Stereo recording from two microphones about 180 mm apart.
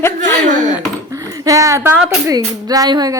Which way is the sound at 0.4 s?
45° right (ahead or behind).